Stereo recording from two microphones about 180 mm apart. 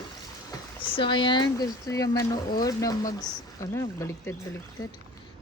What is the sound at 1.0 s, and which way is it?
Speech, 25° left (ahead or behind).